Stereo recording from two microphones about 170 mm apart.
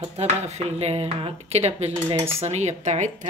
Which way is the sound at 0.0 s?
40° right (ahead or behind).